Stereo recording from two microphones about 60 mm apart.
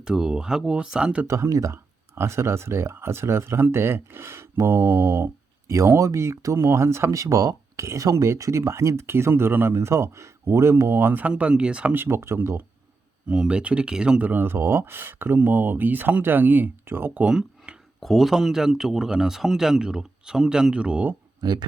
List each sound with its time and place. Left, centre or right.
0.0 s speech: centre
1.5 s speech: right
1.7 s speech: right
5.6 s speech: right
7.1 s speech: right
8.1 s speech: right
8.4 s speech: right
9.7 s speech: right; by 11.9 s centre
11.9 s speech: right
13.3 s speech: centre
14.2 s speech: right
17.2 s speech: centre
18.0 s speech: centre